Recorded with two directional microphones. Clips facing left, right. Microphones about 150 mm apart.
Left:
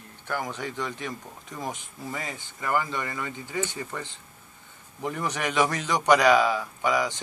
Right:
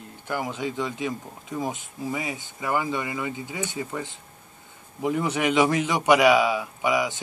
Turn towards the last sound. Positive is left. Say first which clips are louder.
# right 1 dB
turn(degrees=-10)  # may be behind; listen again after turning